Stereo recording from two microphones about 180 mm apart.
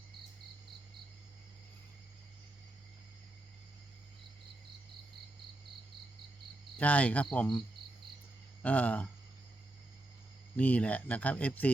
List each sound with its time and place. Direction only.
6.7 s speech: 10° left (ahead or behind)
8.6 s speech: 10° left (ahead or behind)
10.6 s speech: 10° left (ahead or behind)